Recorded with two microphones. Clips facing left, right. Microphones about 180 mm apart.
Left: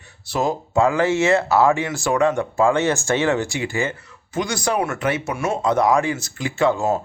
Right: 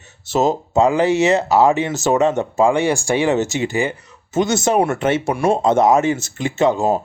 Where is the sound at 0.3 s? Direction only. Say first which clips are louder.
Right 5 dB; 25° right (ahead or behind).